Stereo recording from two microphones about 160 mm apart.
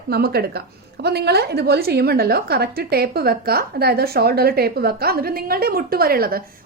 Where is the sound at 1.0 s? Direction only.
90° right.